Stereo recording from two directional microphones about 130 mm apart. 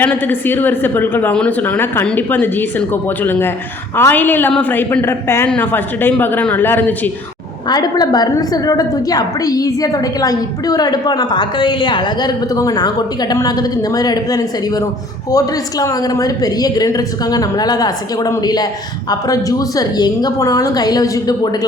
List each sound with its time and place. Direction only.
0.0 s speech: 15° left (ahead or behind)
7.7 s a woman's voice: 30° left (ahead or behind)